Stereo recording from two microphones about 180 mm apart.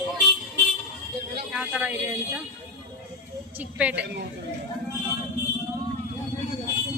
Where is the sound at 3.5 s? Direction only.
10° right (ahead or behind).